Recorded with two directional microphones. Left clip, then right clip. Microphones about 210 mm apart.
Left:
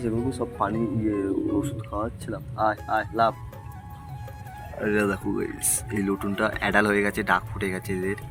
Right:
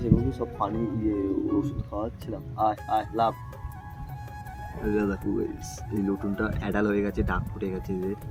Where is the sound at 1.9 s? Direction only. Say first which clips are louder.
Left 3 dB; 10° right (ahead or behind).